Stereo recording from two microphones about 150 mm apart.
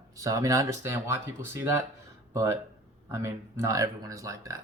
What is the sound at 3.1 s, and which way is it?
A man's voice, 20° right (ahead or behind).